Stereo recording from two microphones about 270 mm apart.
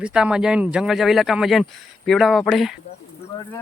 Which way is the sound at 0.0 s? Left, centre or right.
Centre.